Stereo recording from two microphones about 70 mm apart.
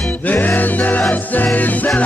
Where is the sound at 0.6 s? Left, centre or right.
Left.